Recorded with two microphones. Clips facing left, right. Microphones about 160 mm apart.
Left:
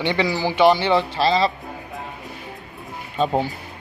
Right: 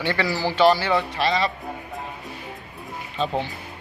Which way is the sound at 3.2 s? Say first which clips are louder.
Left 5 dB; 40° left (ahead or behind).